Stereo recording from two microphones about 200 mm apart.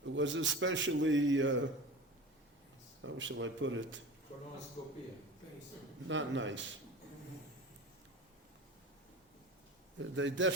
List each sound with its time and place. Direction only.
0.2 s a man's voice: 70° right (ahead or behind)
3.0 s a man's voice: 70° right (ahead or behind)
6.1 s a man's voice: 70° right (ahead or behind)
10.0 s a man's voice: 70° right (ahead or behind)